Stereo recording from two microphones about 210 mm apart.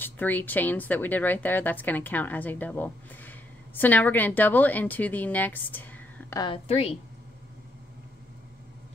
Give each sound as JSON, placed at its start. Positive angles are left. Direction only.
{"t": 0.0, "sound": "speech", "side_deg": 10}
{"t": 6.4, "sound": "a woman's voice", "side_deg": 25}